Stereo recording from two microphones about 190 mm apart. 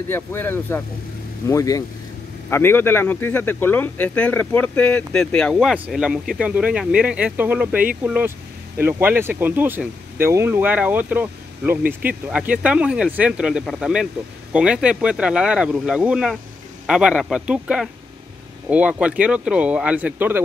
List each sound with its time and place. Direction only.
0.1 s speech: 10° left (ahead or behind); by 20.3 s 10° right (ahead or behind)